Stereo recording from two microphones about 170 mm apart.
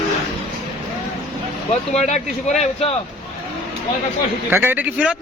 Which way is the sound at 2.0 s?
40° left (ahead or behind).